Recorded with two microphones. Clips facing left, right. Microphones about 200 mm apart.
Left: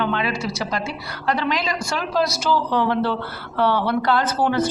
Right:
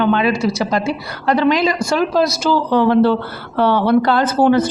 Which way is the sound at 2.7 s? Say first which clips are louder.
Right 8 dB; 35° right (ahead or behind).